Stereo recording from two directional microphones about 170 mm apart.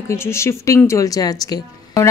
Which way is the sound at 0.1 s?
15° left (ahead or behind).